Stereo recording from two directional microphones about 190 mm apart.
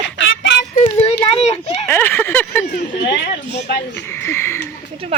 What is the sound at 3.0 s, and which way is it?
Speech, 60° left (ahead or behind).